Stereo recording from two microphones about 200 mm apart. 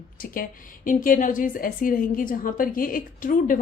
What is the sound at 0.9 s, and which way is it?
A woman's voice, 40° left (ahead or behind).